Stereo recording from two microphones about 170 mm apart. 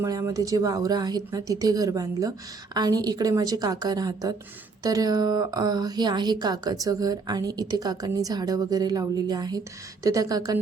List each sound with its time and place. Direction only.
0.0 s a woman's voice: 20° right (ahead or behind)